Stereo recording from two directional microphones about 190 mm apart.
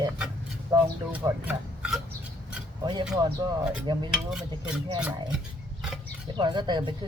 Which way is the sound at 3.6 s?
5° right (ahead or behind).